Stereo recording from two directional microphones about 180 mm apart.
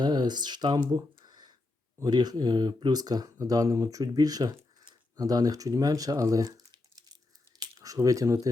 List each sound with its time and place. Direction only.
0.0 s speech: 25° right (ahead or behind)